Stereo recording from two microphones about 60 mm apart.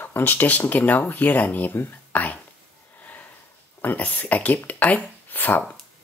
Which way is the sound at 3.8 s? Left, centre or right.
Left.